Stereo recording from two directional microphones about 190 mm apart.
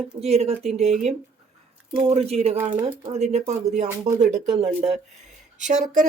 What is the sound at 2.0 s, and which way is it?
Speech, 35° right (ahead or behind).